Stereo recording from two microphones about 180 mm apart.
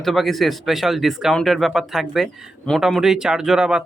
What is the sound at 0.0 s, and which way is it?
Speech, centre (ahead or behind).